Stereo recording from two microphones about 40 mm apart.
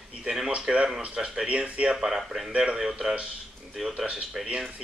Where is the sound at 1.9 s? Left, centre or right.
Centre.